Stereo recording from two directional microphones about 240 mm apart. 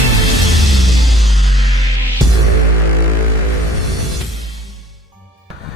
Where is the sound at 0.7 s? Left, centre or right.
Centre.